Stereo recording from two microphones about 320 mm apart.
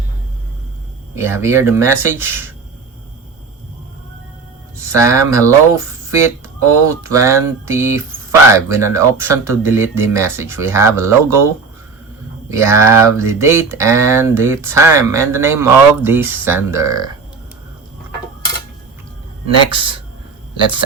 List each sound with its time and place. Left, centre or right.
1.1 s speech: centre
4.9 s speech: centre
19.7 s speech: centre